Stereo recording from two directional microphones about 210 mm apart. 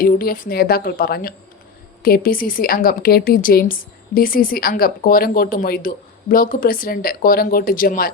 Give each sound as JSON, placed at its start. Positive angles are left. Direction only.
{"t": 0.0, "sound": "speech", "side_deg": 45}